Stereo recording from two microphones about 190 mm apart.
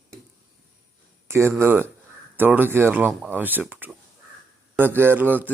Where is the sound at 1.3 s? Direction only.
15° right (ahead or behind).